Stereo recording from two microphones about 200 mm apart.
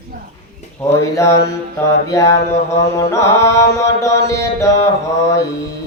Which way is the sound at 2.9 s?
15° left (ahead or behind).